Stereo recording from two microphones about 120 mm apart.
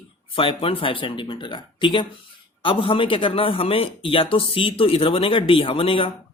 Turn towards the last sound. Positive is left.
turn(degrees=50)  # may be behind; listen again after turning